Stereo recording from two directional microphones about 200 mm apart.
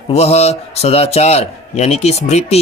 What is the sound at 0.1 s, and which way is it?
A man's voice, 30° left (ahead or behind).